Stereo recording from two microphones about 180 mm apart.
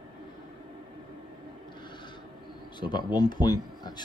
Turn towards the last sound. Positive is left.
turn(degrees=20)  # may be behind; listen again after turning